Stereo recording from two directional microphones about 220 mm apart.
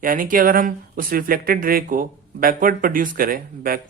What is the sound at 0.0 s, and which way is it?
Speech, 40° right (ahead or behind).